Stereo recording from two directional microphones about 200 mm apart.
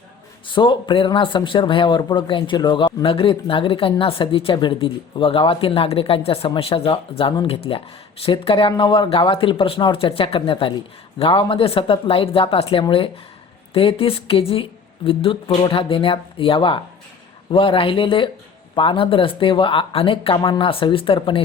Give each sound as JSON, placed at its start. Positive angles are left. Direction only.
{"t": 0.4, "sound": "a man's voice", "side_deg": 25}